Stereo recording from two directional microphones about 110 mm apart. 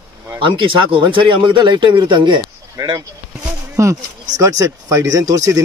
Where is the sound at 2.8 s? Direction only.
35° right (ahead or behind).